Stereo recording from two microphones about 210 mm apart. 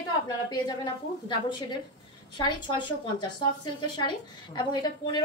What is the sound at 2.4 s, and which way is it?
A woman's voice, 20° left (ahead or behind).